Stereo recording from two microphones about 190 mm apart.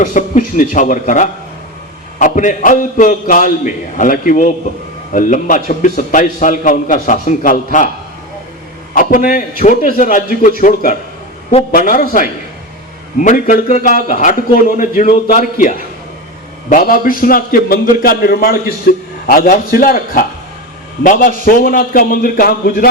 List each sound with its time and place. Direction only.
0.0 s a man's voice: 45° left (ahead or behind)
9.0 s a man's voice: 50° left (ahead or behind)
16.6 s a man's voice: 45° left (ahead or behind)